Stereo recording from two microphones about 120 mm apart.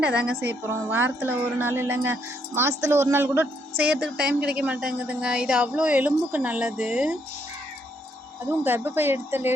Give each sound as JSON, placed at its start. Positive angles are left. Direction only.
{"t": 0.0, "sound": "a woman's voice", "side_deg": -10}
{"t": 8.4, "sound": "speech", "side_deg": -15}